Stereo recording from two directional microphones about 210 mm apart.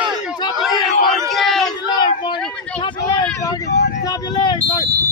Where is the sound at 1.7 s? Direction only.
20° left (ahead or behind).